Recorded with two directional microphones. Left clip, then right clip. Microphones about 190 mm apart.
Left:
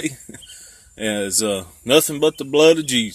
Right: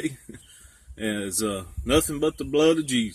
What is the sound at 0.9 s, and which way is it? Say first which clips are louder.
Speech: left 7 dB; 10° left (ahead or behind).